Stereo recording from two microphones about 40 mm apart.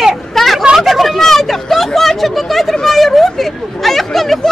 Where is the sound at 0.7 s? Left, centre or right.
Centre.